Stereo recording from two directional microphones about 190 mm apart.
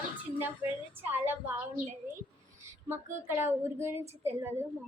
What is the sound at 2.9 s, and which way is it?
A woman's voice, 10° right (ahead or behind).